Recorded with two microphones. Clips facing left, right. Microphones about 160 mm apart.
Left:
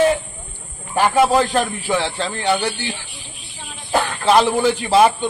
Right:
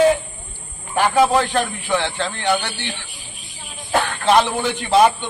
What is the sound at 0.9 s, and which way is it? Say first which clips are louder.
Speech: left 1 dB; 5° left (ahead or behind).